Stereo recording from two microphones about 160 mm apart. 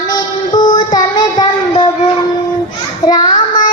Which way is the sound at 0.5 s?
25° left (ahead or behind).